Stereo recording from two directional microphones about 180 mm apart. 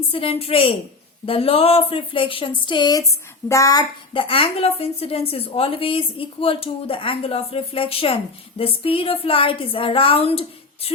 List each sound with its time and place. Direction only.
0.1 s a woman's voice: 30° left (ahead or behind)